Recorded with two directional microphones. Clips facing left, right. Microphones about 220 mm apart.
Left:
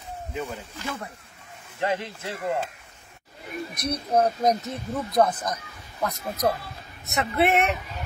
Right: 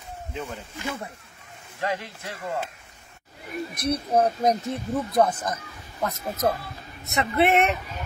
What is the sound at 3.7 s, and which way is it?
Speech, 30° right (ahead or behind).